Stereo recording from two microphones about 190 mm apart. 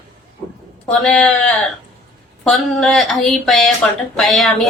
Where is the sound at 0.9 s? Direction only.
Centre (ahead or behind).